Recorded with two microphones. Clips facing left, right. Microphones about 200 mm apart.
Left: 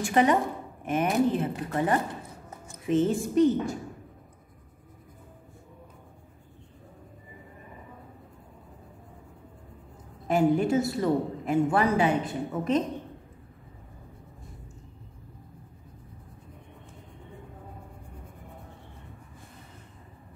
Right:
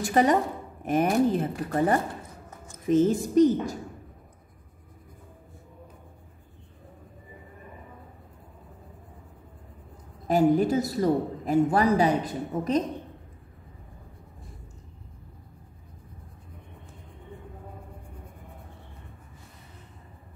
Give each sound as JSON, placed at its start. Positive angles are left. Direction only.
{"t": 0.0, "sound": "a woman's voice", "side_deg": -40}
{"t": 10.2, "sound": "a woman's voice", "side_deg": -35}